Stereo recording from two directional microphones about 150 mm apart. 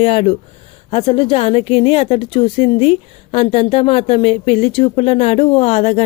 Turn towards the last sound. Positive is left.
turn(degrees=45)  # may be behind; listen again after turning